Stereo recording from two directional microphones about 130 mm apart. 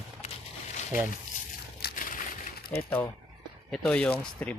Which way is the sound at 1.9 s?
90° left.